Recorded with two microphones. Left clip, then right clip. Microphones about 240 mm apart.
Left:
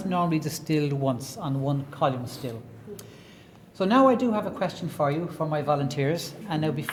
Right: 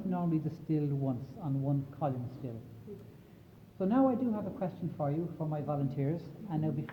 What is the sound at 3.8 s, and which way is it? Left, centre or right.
Speech, left.